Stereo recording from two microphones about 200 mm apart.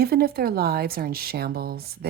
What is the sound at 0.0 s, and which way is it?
A woman's voice, 50° right (ahead or behind).